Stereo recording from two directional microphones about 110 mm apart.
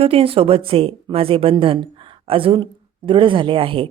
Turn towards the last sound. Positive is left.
turn(degrees=-55)  # may be behind; listen again after turning